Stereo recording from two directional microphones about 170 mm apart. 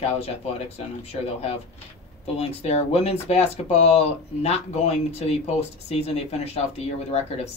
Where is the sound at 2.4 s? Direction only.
40° left (ahead or behind).